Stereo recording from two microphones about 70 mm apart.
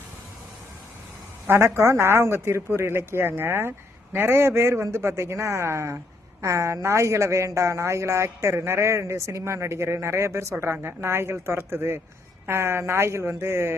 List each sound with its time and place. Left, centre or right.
1.5 s a woman's voice: right